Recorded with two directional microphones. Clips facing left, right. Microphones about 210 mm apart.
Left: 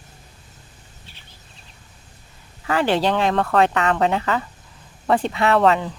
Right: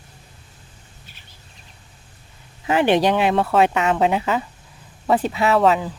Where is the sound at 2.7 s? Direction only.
20° right (ahead or behind); by 5.9 s 5° right (ahead or behind).